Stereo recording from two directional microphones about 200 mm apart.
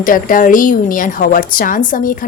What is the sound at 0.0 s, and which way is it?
A woman's voice, 45° left (ahead or behind).